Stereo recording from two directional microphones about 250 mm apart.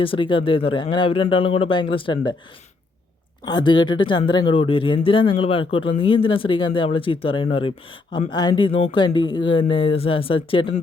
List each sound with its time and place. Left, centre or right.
0.0 s speech: left
3.4 s speech: centre